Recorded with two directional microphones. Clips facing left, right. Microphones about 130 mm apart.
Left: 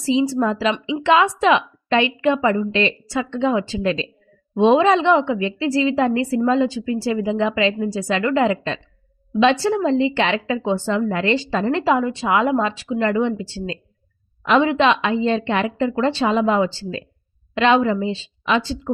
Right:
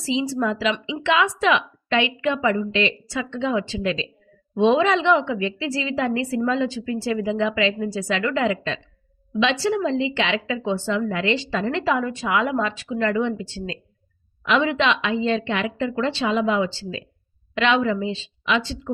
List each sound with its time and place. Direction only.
0.0 s a woman's voice: 40° left (ahead or behind)
9.4 s a woman's voice: 45° left (ahead or behind)